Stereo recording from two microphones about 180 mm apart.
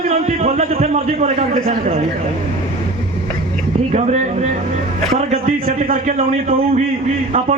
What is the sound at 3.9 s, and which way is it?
Speech, 40° right (ahead or behind).